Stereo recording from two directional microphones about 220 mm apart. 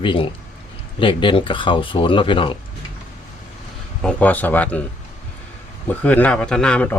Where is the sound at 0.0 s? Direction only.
25° left (ahead or behind).